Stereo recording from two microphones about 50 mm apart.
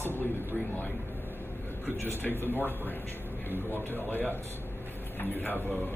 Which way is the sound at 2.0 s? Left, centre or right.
Left.